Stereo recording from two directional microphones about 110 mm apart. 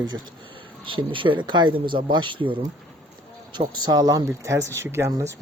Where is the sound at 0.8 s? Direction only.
50° right (ahead or behind).